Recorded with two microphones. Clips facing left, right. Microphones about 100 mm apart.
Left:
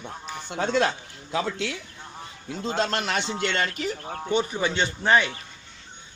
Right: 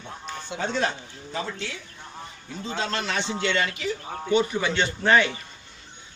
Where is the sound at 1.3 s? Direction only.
90° left.